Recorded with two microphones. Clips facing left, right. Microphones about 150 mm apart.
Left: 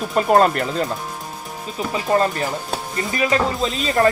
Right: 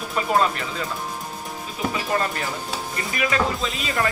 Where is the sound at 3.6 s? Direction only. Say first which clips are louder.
Left 6 dB; 45° left (ahead or behind).